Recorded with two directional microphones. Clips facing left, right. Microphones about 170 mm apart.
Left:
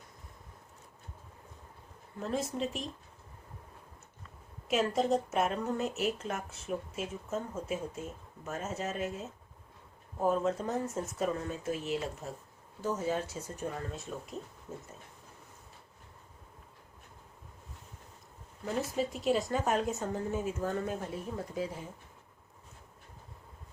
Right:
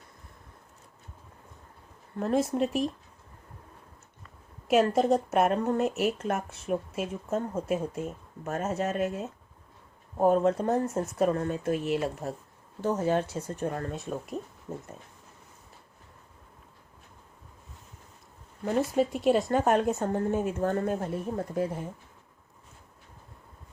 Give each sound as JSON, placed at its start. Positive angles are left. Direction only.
{"t": 2.1, "sound": "a woman's voice", "side_deg": -60}
{"t": 4.7, "sound": "a woman's voice", "side_deg": -55}
{"t": 18.6, "sound": "a woman's voice", "side_deg": -55}